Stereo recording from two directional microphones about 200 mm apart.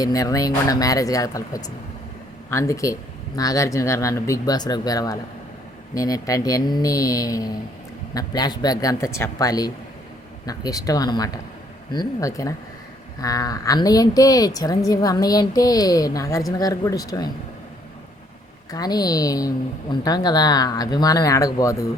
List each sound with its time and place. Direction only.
0.0 s speech: 15° left (ahead or behind)
18.7 s speech: 20° left (ahead or behind)